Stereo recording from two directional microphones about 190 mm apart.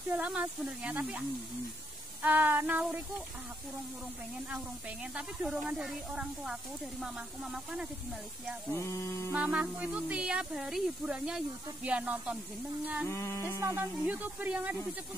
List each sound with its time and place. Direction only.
0.1 s speech: 5° right (ahead or behind)
2.2 s speech: 10° right (ahead or behind)
5.1 s speech: 5° right (ahead or behind)
8.7 s music: 15° left (ahead or behind)
9.3 s speech: 5° right (ahead or behind)
13.0 s music: 15° left (ahead or behind)
13.6 s speech: 15° right (ahead or behind)